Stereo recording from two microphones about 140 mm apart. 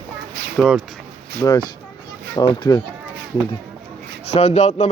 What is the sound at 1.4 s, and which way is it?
Speech, 30° left (ahead or behind).